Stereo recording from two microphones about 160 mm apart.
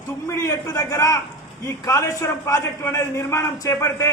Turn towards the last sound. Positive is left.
turn(degrees=20)  # may be behind; listen again after turning